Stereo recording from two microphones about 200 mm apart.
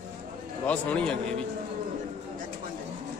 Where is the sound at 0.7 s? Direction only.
5° left (ahead or behind).